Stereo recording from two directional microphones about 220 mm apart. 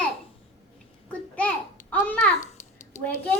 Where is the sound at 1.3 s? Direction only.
5° left (ahead or behind).